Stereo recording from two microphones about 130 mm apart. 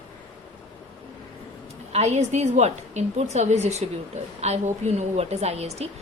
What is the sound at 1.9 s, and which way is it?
A woman's voice, 55° right (ahead or behind).